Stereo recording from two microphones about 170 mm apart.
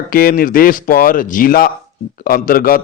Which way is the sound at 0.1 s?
55° left (ahead or behind).